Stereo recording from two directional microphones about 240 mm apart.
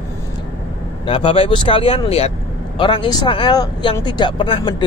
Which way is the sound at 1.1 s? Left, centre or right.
Left.